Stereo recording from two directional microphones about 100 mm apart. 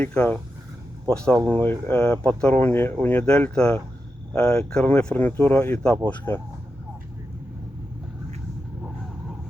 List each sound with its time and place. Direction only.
0.0 s speech: 15° left (ahead or behind)